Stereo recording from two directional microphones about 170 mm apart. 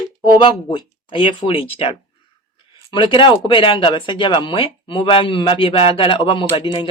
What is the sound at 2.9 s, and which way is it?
Speech, 30° left (ahead or behind).